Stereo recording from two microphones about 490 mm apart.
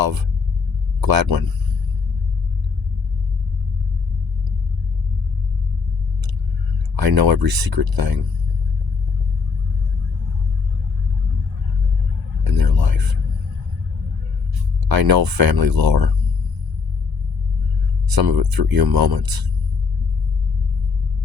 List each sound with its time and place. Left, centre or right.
1.0 s speech: right
6.9 s speech: right
12.5 s speech: right
14.8 s speech: right
18.1 s speech: right